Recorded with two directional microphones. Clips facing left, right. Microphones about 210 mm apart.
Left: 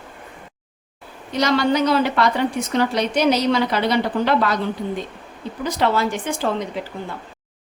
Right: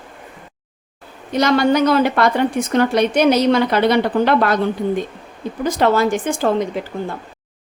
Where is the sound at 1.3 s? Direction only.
50° right (ahead or behind).